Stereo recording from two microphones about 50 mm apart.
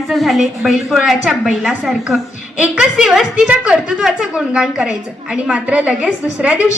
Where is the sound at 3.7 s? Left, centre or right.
Centre.